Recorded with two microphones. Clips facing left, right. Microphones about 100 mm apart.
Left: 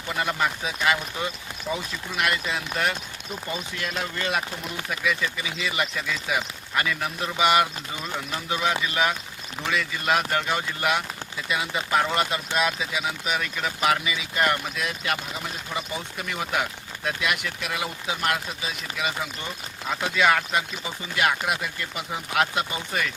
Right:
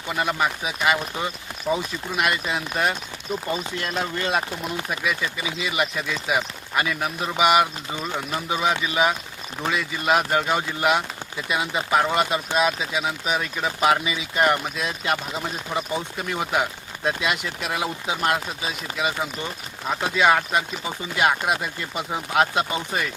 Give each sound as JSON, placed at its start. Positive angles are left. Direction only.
{"t": 0.1, "sound": "speech", "side_deg": -15}